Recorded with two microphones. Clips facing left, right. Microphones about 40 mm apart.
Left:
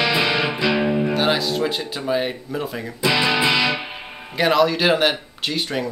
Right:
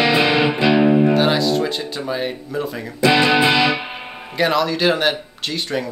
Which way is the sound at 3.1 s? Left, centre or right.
Right.